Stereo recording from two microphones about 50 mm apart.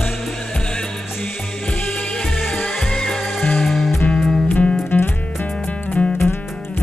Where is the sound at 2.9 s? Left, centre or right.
Centre.